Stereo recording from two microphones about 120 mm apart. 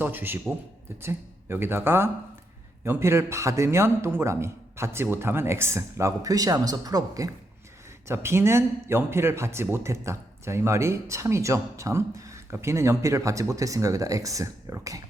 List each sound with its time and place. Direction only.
0.0 s a man's voice: 15° right (ahead or behind)